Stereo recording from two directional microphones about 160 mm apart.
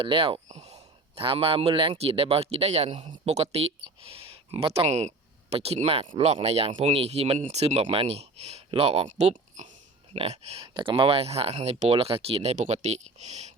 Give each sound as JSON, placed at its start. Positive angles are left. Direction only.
{"t": 0.0, "sound": "speech", "side_deg": -35}